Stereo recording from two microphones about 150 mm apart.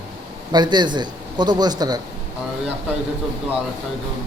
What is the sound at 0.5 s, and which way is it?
A man's voice, 30° right (ahead or behind).